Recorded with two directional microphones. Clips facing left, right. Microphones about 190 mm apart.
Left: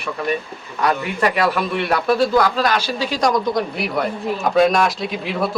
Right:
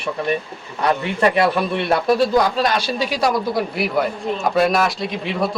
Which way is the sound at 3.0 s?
10° right (ahead or behind).